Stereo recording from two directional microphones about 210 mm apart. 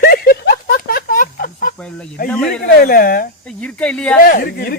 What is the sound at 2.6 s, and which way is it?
Speech, 45° left (ahead or behind).